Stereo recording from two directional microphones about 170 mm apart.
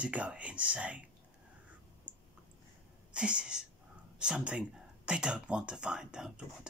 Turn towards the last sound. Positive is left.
turn(degrees=-5)  # may be behind; listen again after turning